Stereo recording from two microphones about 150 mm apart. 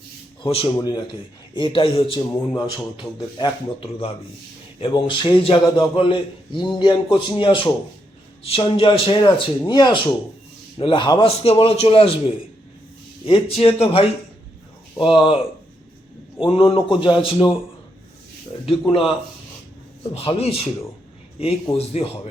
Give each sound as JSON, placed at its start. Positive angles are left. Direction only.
{"t": 0.4, "sound": "a man's voice", "side_deg": 40}
{"t": 0.8, "sound": "a man's voice", "side_deg": 30}
{"t": 11.3, "sound": "a man's voice", "side_deg": 40}
{"t": 13.2, "sound": "a man's voice", "side_deg": 40}
{"t": 16.4, "sound": "a man's voice", "side_deg": 35}
{"t": 18.6, "sound": "a man's voice", "side_deg": 35}
{"t": 20.1, "sound": "a man's voice", "side_deg": 40}